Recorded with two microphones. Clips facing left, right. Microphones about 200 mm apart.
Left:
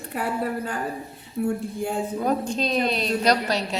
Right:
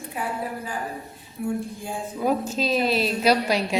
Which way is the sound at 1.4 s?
65° left (ahead or behind).